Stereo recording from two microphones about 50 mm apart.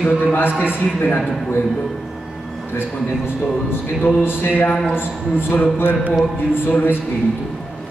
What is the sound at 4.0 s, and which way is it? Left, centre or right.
A man's voice, left.